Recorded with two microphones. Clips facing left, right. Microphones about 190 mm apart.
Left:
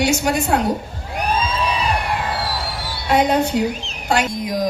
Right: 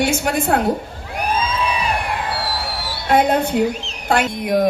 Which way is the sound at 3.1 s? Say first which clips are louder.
Right 1 dB; 55° right (ahead or behind).